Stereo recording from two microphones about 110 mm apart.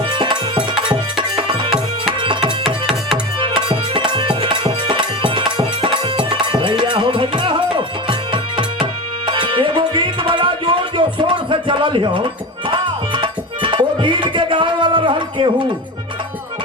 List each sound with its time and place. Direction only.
0.1 s music: 45° right (ahead or behind)
2.2 s tabla: 50° right (ahead or behind)
2.6 s music: centre (ahead or behind)
3.4 s music: 50° right (ahead or behind)